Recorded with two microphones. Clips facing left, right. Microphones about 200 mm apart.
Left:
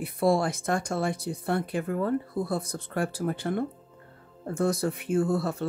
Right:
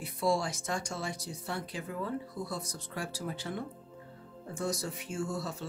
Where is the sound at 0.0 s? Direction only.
55° left (ahead or behind).